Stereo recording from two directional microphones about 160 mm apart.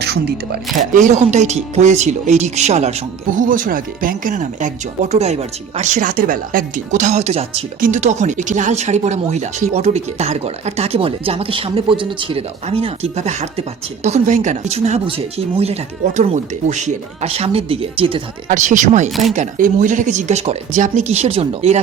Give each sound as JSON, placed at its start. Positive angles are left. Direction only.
{"t": 0.0, "sound": "speech", "side_deg": -90}
{"t": 0.9, "sound": "speech", "side_deg": -50}
{"t": 3.3, "sound": "speech", "side_deg": -55}
{"t": 7.8, "sound": "speech", "side_deg": -50}
{"t": 18.4, "sound": "speech", "side_deg": -50}